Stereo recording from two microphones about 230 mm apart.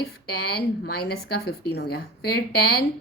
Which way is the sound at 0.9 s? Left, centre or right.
Left.